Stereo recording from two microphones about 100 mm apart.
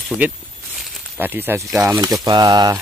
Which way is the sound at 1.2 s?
20° right (ahead or behind).